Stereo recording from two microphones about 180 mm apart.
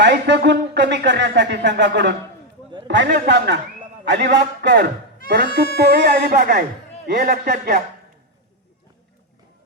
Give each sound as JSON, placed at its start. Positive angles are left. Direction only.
{"t": 0.0, "sound": "speech", "side_deg": -75}
{"t": 5.7, "sound": "music", "side_deg": -60}